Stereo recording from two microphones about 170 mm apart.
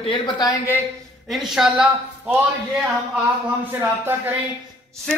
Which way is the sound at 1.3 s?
Centre (ahead or behind).